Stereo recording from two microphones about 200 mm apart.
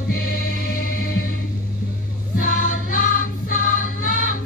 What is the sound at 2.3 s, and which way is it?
Music, 45° left (ahead or behind).